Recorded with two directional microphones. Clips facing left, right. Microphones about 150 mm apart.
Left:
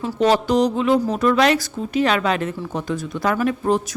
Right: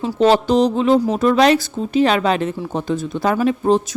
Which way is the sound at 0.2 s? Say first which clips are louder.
Right 3 dB; 30° right (ahead or behind).